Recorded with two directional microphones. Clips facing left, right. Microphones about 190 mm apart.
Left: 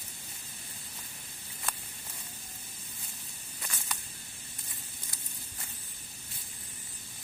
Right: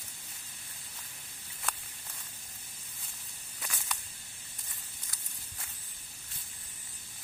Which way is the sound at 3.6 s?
Centre (ahead or behind).